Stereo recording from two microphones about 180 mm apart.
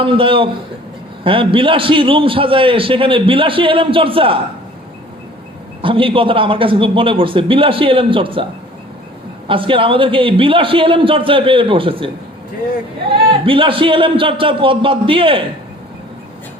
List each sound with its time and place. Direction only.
0.0 s a man's voice: 30° right (ahead or behind)
5.8 s a man's voice: 30° right (ahead or behind)
9.5 s a man's voice: 30° right (ahead or behind)
13.4 s a man's voice: 30° right (ahead or behind)